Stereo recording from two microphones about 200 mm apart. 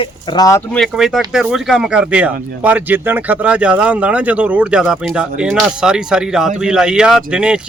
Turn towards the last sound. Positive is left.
turn(degrees=-5)  # may be behind; listen again after turning